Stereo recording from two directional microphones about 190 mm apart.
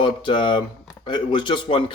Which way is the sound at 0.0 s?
25° left (ahead or behind).